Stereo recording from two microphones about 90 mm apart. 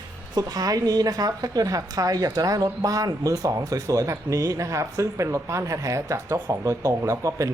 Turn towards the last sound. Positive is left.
turn(degrees=-35)  # may be behind; listen again after turning